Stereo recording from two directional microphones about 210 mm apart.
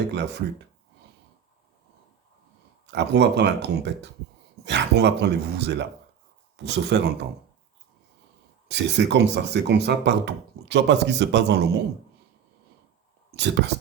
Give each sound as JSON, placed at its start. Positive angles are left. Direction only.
{"t": 0.1, "sound": "a sound", "side_deg": -55}
{"t": 2.9, "sound": "speech", "side_deg": -55}
{"t": 8.6, "sound": "speech", "side_deg": -55}
{"t": 13.3, "sound": "speech", "side_deg": -55}